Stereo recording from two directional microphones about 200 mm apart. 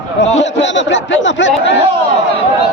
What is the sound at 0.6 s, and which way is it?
Speech, 65° left (ahead or behind).